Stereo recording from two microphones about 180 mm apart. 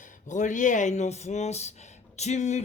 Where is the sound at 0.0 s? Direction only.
45° left (ahead or behind).